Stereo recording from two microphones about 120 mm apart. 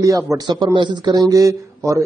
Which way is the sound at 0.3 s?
25° right (ahead or behind).